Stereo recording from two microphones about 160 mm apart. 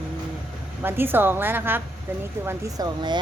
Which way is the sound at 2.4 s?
25° right (ahead or behind).